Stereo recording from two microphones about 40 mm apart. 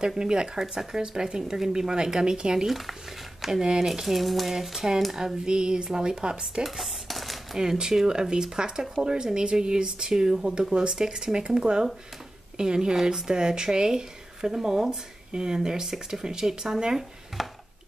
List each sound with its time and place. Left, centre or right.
0.2 s speech: centre
3.4 s speech: centre
6.6 s dishes: centre
7.5 s speech: centre
17.4 s a sound: centre